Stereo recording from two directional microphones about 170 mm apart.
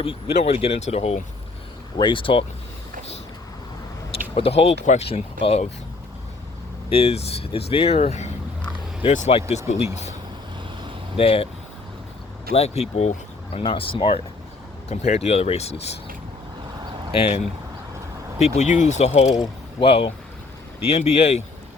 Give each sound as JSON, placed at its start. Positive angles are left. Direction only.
{"t": 0.0, "sound": "speech", "side_deg": 35}
{"t": 2.0, "sound": "speech", "side_deg": 30}
{"t": 4.4, "sound": "speech", "side_deg": 35}
{"t": 6.9, "sound": "speech", "side_deg": 35}
{"t": 11.2, "sound": "speech", "side_deg": 35}
{"t": 12.5, "sound": "speech", "side_deg": 40}
{"t": 17.2, "sound": "speech", "side_deg": 35}